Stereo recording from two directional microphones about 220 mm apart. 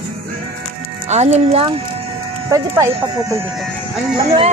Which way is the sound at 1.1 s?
30° right (ahead or behind).